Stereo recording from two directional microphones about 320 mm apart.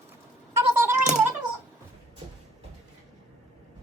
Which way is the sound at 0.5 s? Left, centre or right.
Centre.